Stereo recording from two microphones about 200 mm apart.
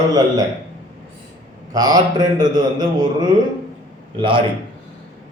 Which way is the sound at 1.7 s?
20° right (ahead or behind).